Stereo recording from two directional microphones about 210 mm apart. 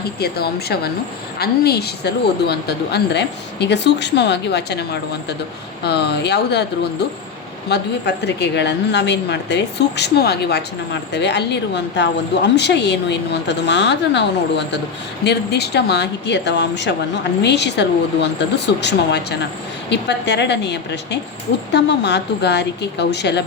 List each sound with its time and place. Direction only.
0.2 s speech: 50° left (ahead or behind)
7.7 s a woman's voice: 55° left (ahead or behind)